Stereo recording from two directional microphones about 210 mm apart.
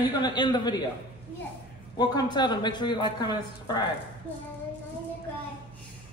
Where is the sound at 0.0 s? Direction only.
20° left (ahead or behind).